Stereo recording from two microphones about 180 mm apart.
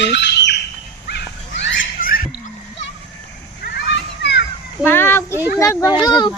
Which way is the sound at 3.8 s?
75° left (ahead or behind).